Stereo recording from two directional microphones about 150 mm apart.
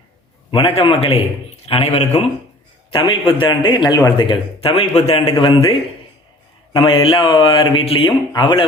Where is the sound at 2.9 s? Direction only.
35° left (ahead or behind).